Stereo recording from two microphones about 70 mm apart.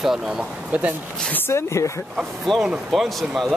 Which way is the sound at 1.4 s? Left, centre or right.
Left.